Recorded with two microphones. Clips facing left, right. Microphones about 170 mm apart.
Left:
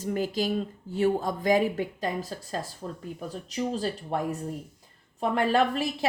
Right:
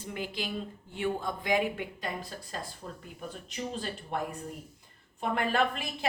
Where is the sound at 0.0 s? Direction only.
40° left (ahead or behind).